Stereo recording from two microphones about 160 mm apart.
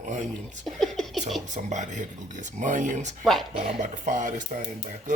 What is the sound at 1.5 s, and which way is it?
Speech, 50° right (ahead or behind).